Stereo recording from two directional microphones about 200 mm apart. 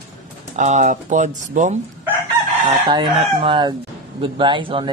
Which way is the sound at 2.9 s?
25° right (ahead or behind).